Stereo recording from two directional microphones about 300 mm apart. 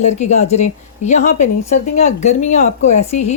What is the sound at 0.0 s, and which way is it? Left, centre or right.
A woman's voice, left.